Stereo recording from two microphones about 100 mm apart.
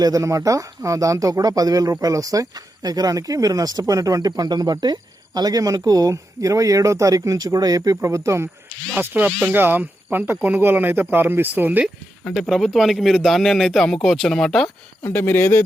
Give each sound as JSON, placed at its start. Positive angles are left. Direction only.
{"t": 0.0, "sound": "speech", "side_deg": -35}
{"t": 9.0, "sound": "speech", "side_deg": -15}
{"t": 12.3, "sound": "speech", "side_deg": 0}
{"t": 15.0, "sound": "speech", "side_deg": 25}